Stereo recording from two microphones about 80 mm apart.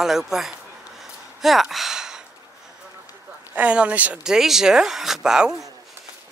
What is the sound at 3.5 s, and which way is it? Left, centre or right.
Speech, centre.